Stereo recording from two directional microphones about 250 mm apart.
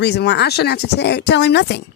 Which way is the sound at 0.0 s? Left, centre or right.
Left.